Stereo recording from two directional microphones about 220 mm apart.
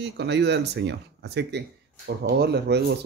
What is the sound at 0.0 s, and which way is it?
Speech, 50° right (ahead or behind).